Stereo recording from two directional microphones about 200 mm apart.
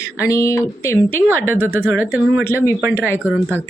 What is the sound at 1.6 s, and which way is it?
Speech, 10° right (ahead or behind).